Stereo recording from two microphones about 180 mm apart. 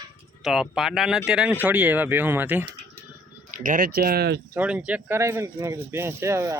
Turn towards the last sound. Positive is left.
turn(degrees=-15)  # may be behind; listen again after turning